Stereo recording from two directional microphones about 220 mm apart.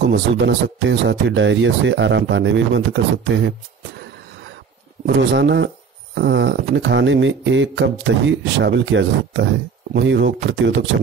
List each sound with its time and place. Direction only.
0.1 s speech: 55° right (ahead or behind)
5.0 s speech: 50° right (ahead or behind)